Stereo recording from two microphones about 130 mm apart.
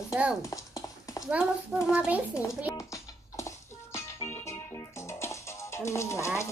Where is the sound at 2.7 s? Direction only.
25° left (ahead or behind).